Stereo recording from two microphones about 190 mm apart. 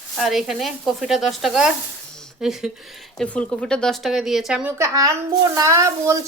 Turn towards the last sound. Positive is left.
turn(degrees=-15)  # may be behind; listen again after turning